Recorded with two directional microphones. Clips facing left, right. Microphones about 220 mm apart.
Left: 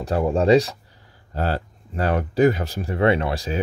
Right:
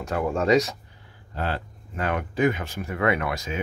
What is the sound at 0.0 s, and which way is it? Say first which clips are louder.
Speech: left 5 dB; 30° left (ahead or behind).